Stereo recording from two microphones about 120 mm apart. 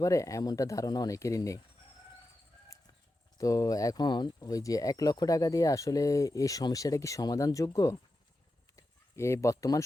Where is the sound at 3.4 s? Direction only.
30° left (ahead or behind).